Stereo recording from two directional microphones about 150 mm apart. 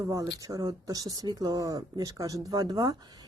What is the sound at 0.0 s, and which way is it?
Speech, 25° right (ahead or behind).